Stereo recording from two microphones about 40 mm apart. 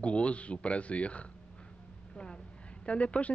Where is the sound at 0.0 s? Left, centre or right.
Left.